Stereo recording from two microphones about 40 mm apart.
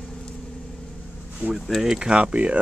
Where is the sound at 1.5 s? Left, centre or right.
Centre.